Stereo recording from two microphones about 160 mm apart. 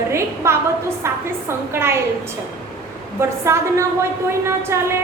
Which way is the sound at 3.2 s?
15° right (ahead or behind).